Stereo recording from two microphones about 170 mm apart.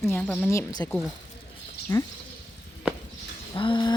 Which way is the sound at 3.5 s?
30° left (ahead or behind).